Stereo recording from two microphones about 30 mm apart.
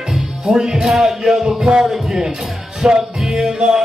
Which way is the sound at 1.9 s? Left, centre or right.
Centre.